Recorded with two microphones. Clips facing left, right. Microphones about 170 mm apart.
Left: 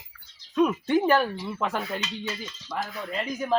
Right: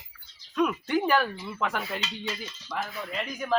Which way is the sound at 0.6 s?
25° left (ahead or behind).